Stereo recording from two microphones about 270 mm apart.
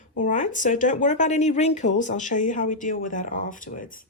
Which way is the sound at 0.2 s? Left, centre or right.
Left.